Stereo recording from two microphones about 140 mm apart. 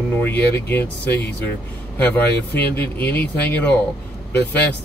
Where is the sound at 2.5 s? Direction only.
15° left (ahead or behind).